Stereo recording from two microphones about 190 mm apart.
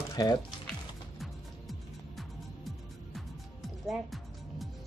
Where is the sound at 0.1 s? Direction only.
20° left (ahead or behind).